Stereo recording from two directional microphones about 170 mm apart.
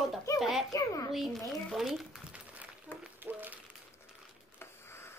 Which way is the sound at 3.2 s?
10° right (ahead or behind).